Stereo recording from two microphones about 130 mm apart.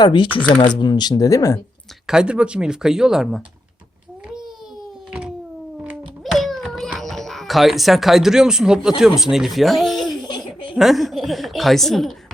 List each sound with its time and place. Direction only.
0.0 s speech: 35° left (ahead or behind)
2.0 s a woman's voice: 5° right (ahead or behind)
4.3 s babbling: 5° right (ahead or behind)
5.8 s a sound: 5° right (ahead or behind)
7.0 s speech: centre (ahead or behind)
10.2 s baby laughter: 35° left (ahead or behind)
10.8 s a woman's voice: centre (ahead or behind)